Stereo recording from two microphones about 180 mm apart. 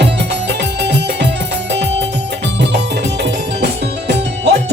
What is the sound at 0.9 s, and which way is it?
Music, 70° right (ahead or behind).